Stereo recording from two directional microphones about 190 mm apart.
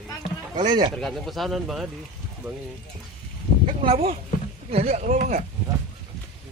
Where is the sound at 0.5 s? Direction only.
25° right (ahead or behind).